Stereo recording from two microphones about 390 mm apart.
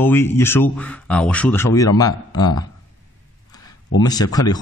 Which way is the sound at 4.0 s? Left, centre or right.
Centre.